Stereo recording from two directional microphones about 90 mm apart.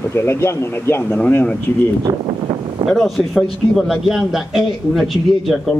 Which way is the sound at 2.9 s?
Centre (ahead or behind).